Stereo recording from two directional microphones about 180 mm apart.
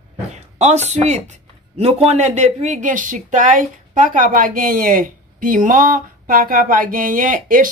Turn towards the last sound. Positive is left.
turn(degrees=-50)  # may be behind; listen again after turning